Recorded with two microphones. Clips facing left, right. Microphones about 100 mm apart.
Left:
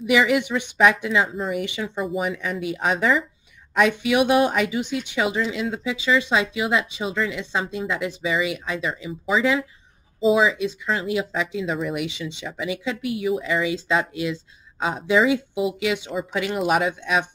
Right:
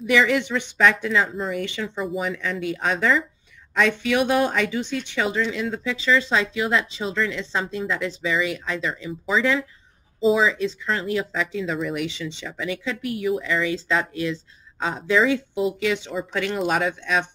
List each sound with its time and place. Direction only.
0.0 s speech: 15° left (ahead or behind)